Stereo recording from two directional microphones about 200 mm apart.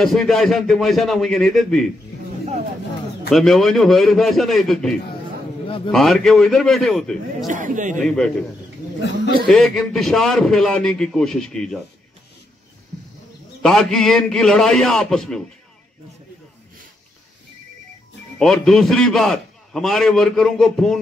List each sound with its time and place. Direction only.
0.0 s a man's voice: centre (ahead or behind)
3.3 s a man's voice: centre (ahead or behind)
7.4 s speech: 40° right (ahead or behind)
9.5 s a man's voice: centre (ahead or behind)
13.6 s a man's voice: 5° left (ahead or behind)
18.4 s a man's voice: centre (ahead or behind)